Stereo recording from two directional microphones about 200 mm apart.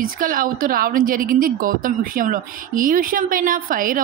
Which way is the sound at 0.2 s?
45° right (ahead or behind).